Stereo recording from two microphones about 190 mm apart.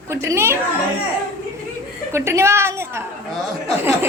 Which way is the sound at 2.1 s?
15° right (ahead or behind).